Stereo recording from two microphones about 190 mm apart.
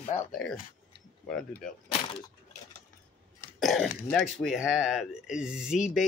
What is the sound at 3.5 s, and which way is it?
Speech, centre (ahead or behind).